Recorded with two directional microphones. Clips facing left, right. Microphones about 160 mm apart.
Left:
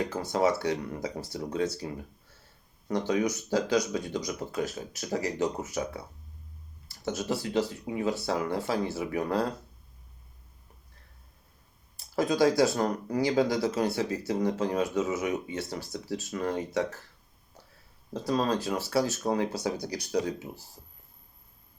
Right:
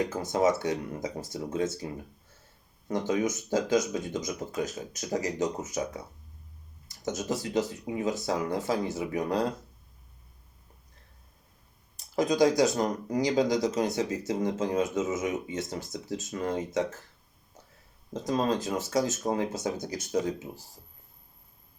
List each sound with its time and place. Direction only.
0.1 s speech: 20° right (ahead or behind)
3.0 s speech: 20° right (ahead or behind)
7.0 s speech: 20° right (ahead or behind)
11.9 s speech: 15° right (ahead or behind)
18.1 s speech: 20° right (ahead or behind)